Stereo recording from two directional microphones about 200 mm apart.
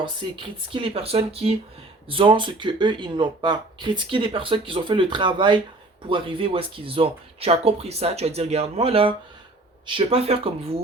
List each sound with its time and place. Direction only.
0.0 s speech: 25° right (ahead or behind)